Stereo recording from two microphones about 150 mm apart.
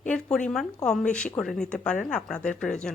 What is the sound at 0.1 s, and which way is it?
Speech, 5° left (ahead or behind).